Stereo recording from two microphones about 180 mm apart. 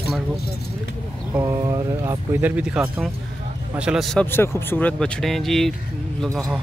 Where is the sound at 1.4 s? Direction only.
20° right (ahead or behind).